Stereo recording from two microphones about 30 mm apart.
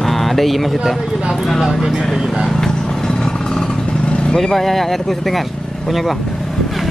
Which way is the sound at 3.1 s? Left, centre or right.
Left.